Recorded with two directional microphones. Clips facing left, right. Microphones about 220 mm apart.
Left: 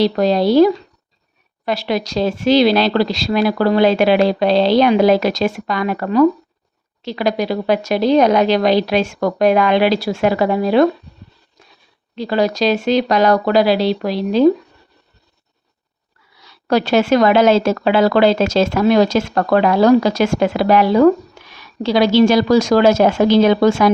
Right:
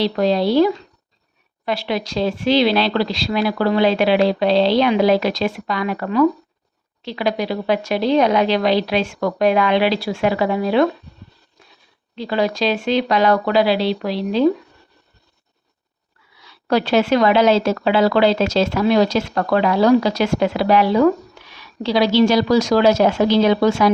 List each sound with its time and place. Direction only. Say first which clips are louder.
0.0 s a woman's voice: left 3 dB; 45° left (ahead or behind)
12.1 s speech: left 3 dB; 40° left (ahead or behind)
16.4 s a woman's voice: left 2 dB; 40° left (ahead or behind)